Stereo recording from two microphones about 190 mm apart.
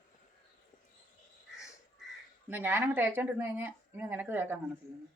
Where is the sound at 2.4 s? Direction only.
10° right (ahead or behind).